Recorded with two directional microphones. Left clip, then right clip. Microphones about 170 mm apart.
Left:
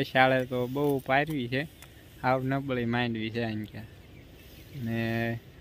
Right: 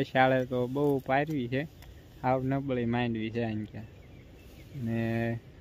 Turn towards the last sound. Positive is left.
turn(degrees=-5)  # may be behind; listen again after turning